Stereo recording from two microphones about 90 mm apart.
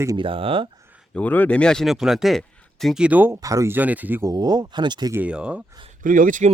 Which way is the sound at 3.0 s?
15° right (ahead or behind).